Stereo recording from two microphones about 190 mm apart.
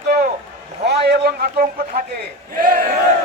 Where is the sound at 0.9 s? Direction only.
60° right (ahead or behind).